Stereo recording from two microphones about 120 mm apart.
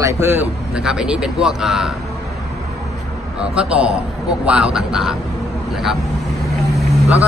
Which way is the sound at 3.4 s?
10° right (ahead or behind).